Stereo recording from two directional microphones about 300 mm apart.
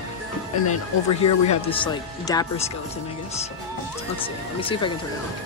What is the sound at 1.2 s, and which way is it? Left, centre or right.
Speech, centre.